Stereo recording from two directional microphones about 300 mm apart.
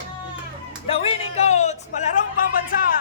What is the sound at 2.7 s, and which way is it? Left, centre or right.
Music, left.